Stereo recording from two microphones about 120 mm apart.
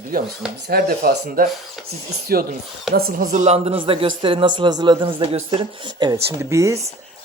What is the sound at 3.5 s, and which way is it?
A man's voice, 50° right (ahead or behind).